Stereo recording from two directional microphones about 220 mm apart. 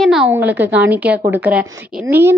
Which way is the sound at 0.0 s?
Centre (ahead or behind).